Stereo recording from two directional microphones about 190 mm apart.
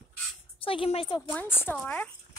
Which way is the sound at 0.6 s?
30° left (ahead or behind).